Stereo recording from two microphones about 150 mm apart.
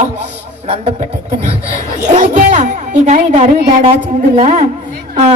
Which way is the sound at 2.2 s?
55° right (ahead or behind).